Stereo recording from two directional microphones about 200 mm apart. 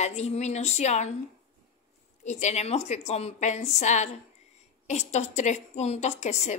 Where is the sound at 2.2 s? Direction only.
35° left (ahead or behind).